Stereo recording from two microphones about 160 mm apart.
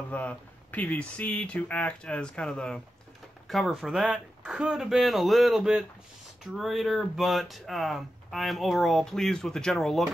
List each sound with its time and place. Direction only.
0.1 s speech: 10° left (ahead or behind)